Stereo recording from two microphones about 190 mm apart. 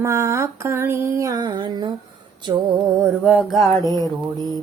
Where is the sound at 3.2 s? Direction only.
5° right (ahead or behind).